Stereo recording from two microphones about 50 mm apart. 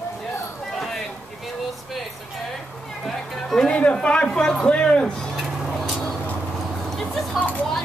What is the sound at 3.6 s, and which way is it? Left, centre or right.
Speech, left.